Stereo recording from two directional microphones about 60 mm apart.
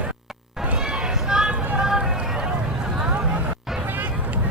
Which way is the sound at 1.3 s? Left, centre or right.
Centre.